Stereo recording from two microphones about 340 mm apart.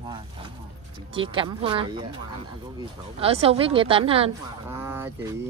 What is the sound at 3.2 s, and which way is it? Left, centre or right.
A woman's voice, centre.